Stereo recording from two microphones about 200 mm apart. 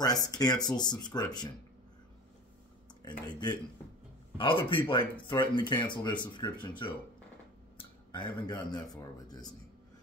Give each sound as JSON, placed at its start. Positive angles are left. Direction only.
{"t": 0.0, "sound": "speech", "side_deg": 20}
{"t": 3.1, "sound": "speech", "side_deg": 20}